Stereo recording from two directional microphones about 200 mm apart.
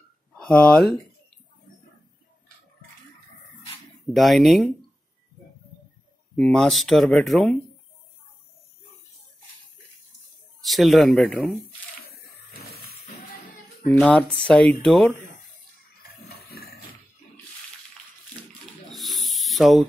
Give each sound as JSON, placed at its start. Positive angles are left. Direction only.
{"t": 0.4, "sound": "speech", "side_deg": 5}
{"t": 4.1, "sound": "speech", "side_deg": 0}
{"t": 6.3, "sound": "speech", "side_deg": 5}
{"t": 10.6, "sound": "speech", "side_deg": 0}
{"t": 12.7, "sound": "music", "side_deg": 50}
{"t": 13.9, "sound": "speech", "side_deg": 5}
{"t": 16.0, "sound": "a sound", "side_deg": 50}
{"t": 18.9, "sound": "a sound", "side_deg": 0}